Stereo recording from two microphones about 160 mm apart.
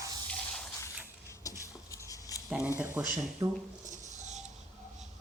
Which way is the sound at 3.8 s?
50° right (ahead or behind).